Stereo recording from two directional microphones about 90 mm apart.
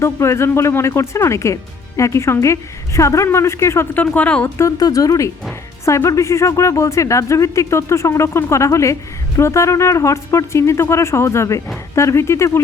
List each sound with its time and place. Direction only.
0.0 s speech: 30° left (ahead or behind)
3.9 s speech: 15° left (ahead or behind)
4.8 s speech: 40° left (ahead or behind)